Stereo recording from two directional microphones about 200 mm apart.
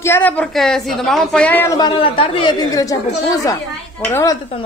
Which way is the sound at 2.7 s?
15° left (ahead or behind).